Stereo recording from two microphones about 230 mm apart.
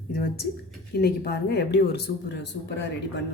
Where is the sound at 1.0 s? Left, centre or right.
Left.